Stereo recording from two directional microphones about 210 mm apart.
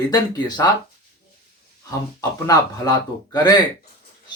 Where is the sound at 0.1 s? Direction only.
20° left (ahead or behind).